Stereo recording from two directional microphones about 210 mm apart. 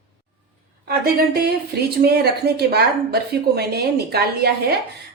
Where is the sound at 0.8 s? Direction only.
50° right (ahead or behind).